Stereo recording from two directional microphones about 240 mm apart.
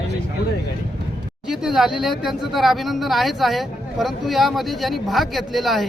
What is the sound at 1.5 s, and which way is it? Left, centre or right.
Speech, centre.